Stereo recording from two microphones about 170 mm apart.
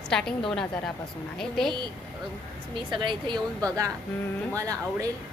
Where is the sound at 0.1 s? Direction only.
5° left (ahead or behind).